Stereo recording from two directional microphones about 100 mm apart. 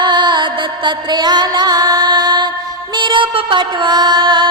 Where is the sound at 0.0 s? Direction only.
50° right (ahead or behind).